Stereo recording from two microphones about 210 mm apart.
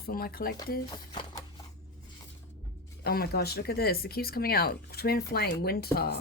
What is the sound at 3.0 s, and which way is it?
Speech, 50° left (ahead or behind).